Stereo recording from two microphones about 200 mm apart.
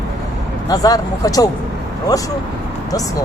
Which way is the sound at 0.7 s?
15° left (ahead or behind).